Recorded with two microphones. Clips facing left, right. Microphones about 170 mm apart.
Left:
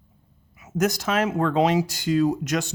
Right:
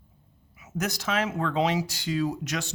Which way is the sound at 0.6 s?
45° left (ahead or behind).